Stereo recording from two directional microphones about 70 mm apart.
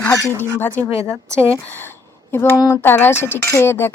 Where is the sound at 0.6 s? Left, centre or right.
Left.